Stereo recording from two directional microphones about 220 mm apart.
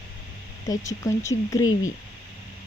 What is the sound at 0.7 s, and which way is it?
Speech, 15° left (ahead or behind).